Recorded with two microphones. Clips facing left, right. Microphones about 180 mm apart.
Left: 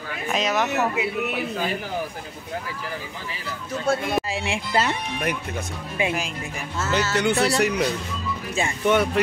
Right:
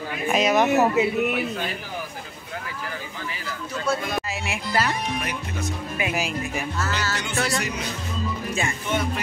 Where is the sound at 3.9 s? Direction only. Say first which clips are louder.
Left 2 dB; 50° left (ahead or behind).